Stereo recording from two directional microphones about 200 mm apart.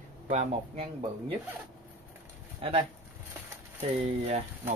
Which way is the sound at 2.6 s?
30° right (ahead or behind).